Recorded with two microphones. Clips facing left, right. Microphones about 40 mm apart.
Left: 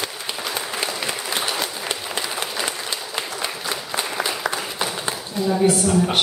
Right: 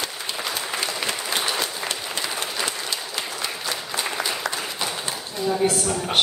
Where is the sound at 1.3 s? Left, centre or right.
Centre.